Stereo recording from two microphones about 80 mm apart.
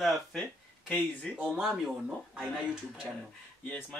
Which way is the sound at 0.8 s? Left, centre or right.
Left.